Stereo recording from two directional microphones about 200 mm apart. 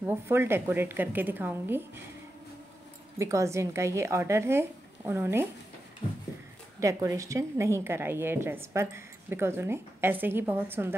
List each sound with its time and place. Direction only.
0.0 s a woman's voice: 10° right (ahead or behind)
3.2 s a woman's voice: 15° right (ahead or behind)
6.8 s a woman's voice: 15° right (ahead or behind)